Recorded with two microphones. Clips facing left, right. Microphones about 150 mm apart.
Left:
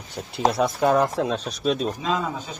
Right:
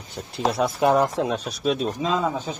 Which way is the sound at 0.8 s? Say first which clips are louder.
Right 1 dB; 20° right (ahead or behind).